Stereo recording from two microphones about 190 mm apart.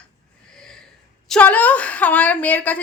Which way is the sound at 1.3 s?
10° left (ahead or behind).